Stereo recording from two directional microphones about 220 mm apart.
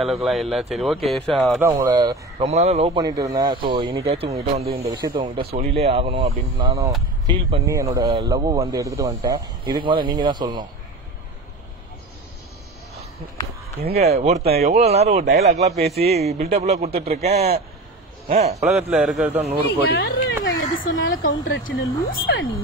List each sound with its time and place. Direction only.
0.0 s speech: centre (ahead or behind)
1.6 s speech: 15° right (ahead or behind)
13.9 s speech: 30° right (ahead or behind)
18.7 s speech: 5° right (ahead or behind)
19.8 s speech: 45° left (ahead or behind)
20.7 s a sound: 60° left (ahead or behind)
21.6 s speech: 40° left (ahead or behind)